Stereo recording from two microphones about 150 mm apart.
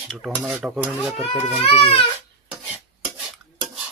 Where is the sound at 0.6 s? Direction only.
10° right (ahead or behind).